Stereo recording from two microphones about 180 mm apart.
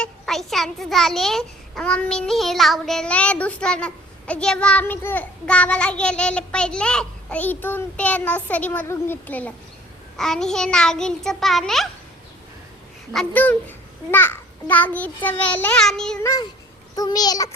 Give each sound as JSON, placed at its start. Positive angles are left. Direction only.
{"t": 0.0, "sound": "a child's voice", "side_deg": 0}
{"t": 13.1, "sound": "a child's voice", "side_deg": 10}
{"t": 16.2, "sound": "a child's voice", "side_deg": 20}